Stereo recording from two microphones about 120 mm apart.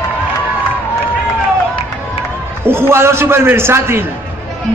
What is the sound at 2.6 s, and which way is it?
A man's voice, 20° right (ahead or behind).